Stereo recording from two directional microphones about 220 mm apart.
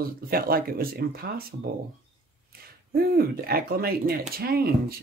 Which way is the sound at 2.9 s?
45° right (ahead or behind).